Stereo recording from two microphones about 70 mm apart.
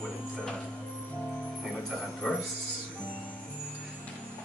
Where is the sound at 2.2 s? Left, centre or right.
Centre.